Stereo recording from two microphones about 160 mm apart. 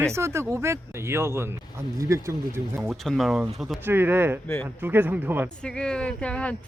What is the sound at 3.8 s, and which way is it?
Speech, 15° right (ahead or behind).